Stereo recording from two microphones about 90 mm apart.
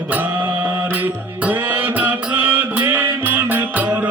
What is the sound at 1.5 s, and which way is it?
Music, 25° right (ahead or behind).